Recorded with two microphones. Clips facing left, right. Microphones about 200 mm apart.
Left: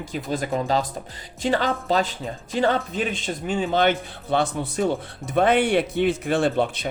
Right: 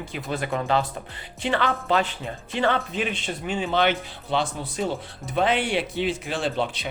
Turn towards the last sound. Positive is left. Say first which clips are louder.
# left 5 dB
turn(degrees=50)  # may be behind; listen again after turning